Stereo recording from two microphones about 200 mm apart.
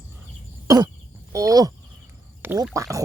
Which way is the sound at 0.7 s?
15° right (ahead or behind).